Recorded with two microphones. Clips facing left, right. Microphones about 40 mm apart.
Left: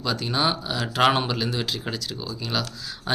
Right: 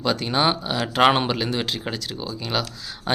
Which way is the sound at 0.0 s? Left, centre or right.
Right.